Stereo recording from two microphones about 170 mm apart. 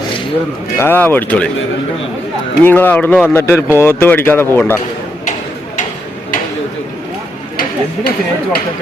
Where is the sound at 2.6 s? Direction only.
10° left (ahead or behind).